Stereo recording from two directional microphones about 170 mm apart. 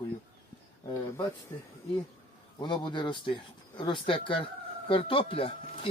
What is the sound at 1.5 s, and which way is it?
Speech, 30° left (ahead or behind).